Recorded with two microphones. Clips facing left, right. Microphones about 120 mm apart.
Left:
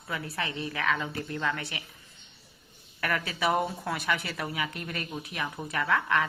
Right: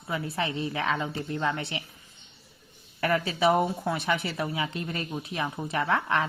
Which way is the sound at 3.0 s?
25° right (ahead or behind).